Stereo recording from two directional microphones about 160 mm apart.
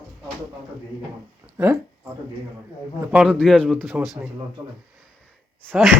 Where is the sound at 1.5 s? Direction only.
15° right (ahead or behind).